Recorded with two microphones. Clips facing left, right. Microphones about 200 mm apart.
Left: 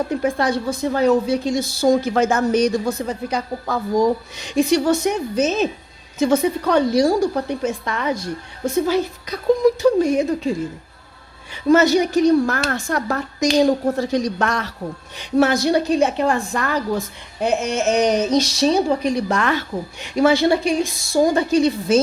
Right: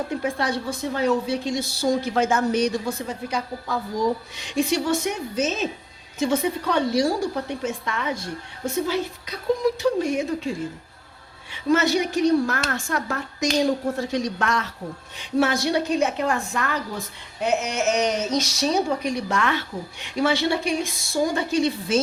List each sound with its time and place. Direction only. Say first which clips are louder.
0.2 s speech: left 5 dB; 45° left (ahead or behind)
11.5 s speech: left 6 dB; 40° left (ahead or behind)